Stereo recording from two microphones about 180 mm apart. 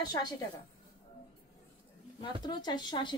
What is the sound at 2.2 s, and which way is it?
Speech, 25° left (ahead or behind).